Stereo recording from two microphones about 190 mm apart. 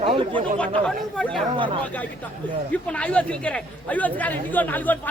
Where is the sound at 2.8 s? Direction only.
5° left (ahead or behind).